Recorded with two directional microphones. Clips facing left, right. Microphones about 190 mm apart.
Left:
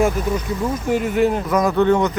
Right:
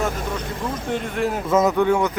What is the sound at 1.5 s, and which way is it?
Speech, 25° right (ahead or behind).